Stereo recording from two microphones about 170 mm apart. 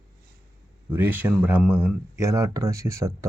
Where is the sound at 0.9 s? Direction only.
10° right (ahead or behind).